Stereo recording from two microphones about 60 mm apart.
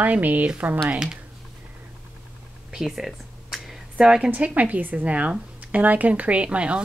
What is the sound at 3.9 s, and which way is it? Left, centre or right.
Speech, centre.